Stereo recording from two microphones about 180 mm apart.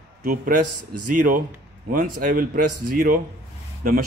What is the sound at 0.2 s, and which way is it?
A man's voice, 50° right (ahead or behind).